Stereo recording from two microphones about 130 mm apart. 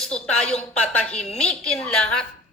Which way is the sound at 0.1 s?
55° left (ahead or behind).